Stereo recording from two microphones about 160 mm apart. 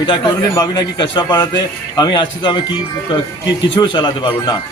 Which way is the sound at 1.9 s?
30° left (ahead or behind).